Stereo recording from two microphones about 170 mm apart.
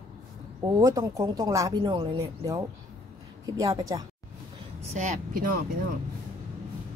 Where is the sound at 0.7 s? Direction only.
20° right (ahead or behind).